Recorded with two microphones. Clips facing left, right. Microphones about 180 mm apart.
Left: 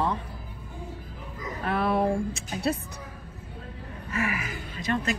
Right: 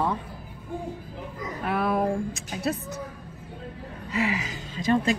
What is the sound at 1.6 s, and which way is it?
Speech, 5° right (ahead or behind).